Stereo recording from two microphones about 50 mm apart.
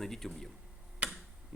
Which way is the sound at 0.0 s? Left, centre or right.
Centre.